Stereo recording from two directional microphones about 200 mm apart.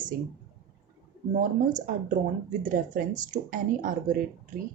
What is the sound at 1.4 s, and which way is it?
Speech, 40° right (ahead or behind).